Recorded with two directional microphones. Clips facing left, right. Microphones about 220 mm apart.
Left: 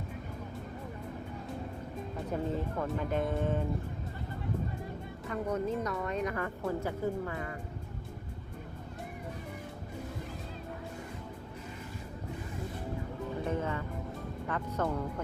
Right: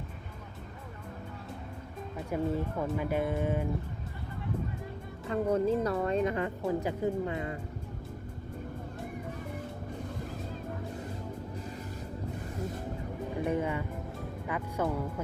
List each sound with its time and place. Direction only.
2.3 s speech: 10° right (ahead or behind)
5.3 s speech: 30° right (ahead or behind)
13.4 s music: 15° right (ahead or behind)
14.4 s speech: 10° right (ahead or behind)